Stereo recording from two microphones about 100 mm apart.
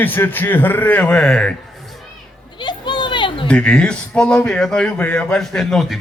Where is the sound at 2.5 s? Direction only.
50° left (ahead or behind).